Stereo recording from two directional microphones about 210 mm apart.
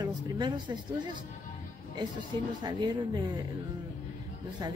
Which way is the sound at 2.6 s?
20° right (ahead or behind).